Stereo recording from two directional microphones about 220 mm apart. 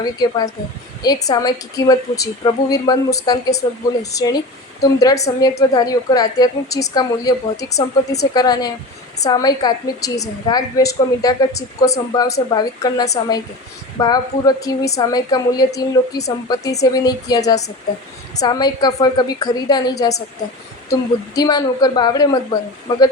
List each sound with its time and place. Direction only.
0.0 s a woman's voice: 15° left (ahead or behind)
21.3 s a woman's voice: 15° left (ahead or behind)